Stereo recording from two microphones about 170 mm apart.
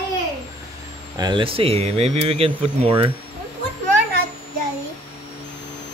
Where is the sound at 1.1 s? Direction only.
25° right (ahead or behind).